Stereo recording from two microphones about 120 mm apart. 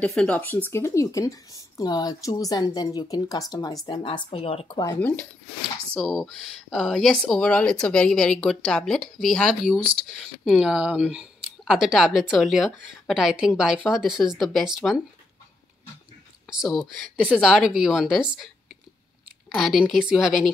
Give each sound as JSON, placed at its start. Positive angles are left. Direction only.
{"t": 0.0, "sound": "speech", "side_deg": 10}
{"t": 4.6, "sound": "speech", "side_deg": 35}
{"t": 4.9, "sound": "speech", "side_deg": 15}
{"t": 5.9, "sound": "speech", "side_deg": -5}
{"t": 16.4, "sound": "speech", "side_deg": 0}
{"t": 19.5, "sound": "speech", "side_deg": 0}